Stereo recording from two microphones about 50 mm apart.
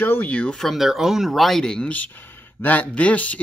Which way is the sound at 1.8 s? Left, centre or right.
Left.